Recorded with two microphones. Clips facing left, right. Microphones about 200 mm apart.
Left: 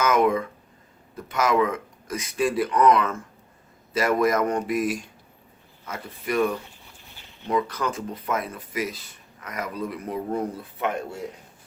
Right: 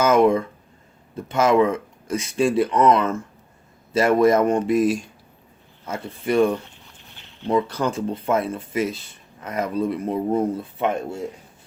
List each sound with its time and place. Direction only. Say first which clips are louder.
0.0 s speech: right 4 dB; 30° right (ahead or behind)